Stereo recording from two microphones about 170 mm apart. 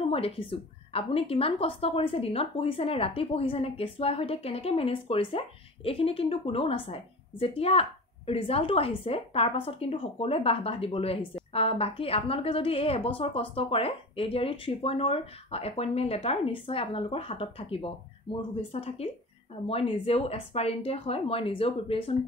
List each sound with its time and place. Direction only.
0.0 s a woman's voice: 35° left (ahead or behind)